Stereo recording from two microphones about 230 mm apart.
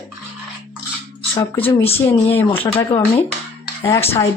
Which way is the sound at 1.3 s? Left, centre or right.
Left.